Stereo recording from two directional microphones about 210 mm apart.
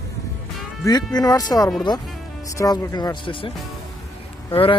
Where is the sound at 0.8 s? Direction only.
20° left (ahead or behind).